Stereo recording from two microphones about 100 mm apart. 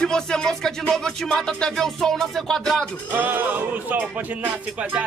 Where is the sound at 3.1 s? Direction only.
20° right (ahead or behind).